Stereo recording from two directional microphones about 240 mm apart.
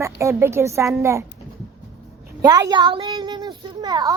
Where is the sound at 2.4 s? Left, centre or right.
Centre.